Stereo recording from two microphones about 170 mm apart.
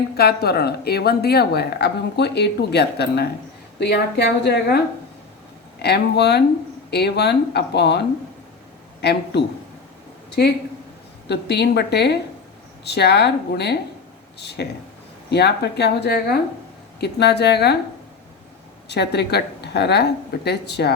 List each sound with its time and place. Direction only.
0.2 s speech: 70° left (ahead or behind)
5.8 s a man's voice: 75° left (ahead or behind)
11.3 s speech: 80° left
17.0 s speech: 75° left (ahead or behind)
18.9 s speech: 75° left (ahead or behind)